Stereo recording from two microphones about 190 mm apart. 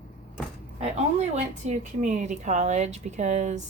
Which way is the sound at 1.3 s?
35° right (ahead or behind).